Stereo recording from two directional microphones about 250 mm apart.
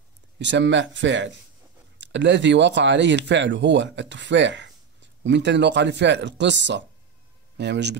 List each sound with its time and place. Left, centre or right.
0.4 s speech: right